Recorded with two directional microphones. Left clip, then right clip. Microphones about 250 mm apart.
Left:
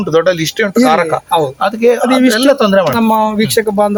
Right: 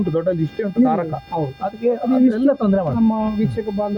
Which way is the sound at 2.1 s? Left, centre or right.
Centre.